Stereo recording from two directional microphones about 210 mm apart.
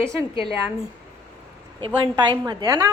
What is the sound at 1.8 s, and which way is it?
A woman's voice, 20° right (ahead or behind).